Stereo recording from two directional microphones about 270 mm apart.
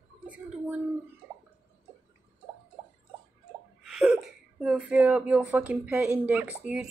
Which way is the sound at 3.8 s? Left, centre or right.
Centre.